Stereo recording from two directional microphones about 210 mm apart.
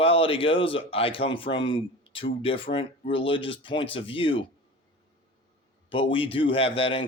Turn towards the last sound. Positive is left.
turn(degrees=25)  # may be behind; listen again after turning